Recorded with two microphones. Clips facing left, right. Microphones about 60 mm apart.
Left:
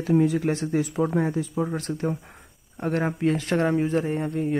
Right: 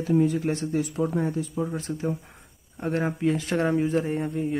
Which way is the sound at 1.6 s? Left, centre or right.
Left.